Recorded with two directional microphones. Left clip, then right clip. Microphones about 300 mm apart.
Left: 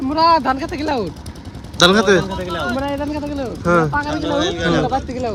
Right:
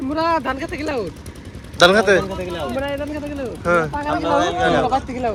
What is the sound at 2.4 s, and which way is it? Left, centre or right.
Speech, left.